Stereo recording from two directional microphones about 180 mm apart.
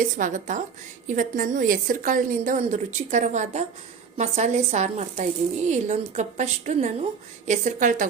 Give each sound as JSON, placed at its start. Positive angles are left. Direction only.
{"t": 0.0, "sound": "a woman's voice", "side_deg": -45}